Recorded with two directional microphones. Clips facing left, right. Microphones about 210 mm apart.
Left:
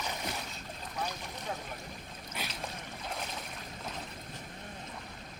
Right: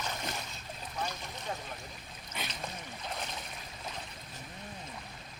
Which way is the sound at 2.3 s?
5° left (ahead or behind).